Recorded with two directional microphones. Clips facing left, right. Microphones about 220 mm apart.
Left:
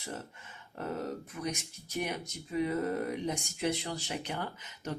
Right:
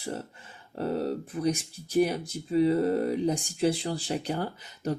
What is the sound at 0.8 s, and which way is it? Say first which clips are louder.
Speech: right 7 dB; 30° right (ahead or behind).